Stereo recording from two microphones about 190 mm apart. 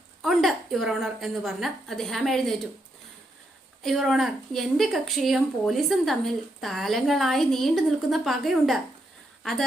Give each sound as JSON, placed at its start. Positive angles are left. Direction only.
{"t": 0.2, "sound": "speech", "side_deg": 0}
{"t": 3.8, "sound": "speech", "side_deg": 0}